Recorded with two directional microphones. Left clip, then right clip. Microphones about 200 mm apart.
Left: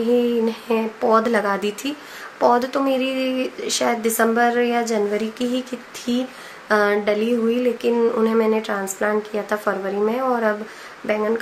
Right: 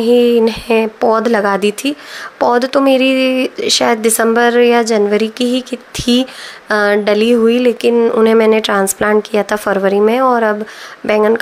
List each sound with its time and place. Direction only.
0.0 s speech: 50° right (ahead or behind)